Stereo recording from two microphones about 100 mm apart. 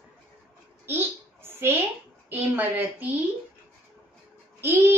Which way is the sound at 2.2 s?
20° right (ahead or behind).